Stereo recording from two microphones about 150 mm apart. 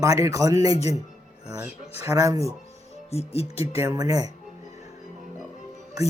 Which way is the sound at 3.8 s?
20° right (ahead or behind).